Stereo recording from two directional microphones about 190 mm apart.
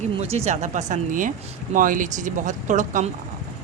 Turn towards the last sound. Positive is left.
turn(degrees=-40)  # may be behind; listen again after turning